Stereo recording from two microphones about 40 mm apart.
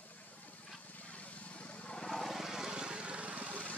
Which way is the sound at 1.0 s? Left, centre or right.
Left.